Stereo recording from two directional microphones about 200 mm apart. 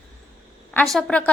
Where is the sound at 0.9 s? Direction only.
5° left (ahead or behind).